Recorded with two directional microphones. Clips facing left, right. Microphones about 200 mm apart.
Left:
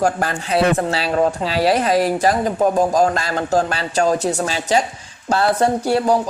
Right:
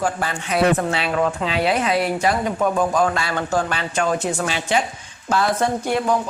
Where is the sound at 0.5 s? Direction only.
35° left (ahead or behind).